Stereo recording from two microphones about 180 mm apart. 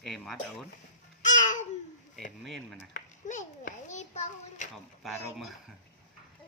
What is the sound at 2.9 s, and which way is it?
A child's voice, 45° left (ahead or behind).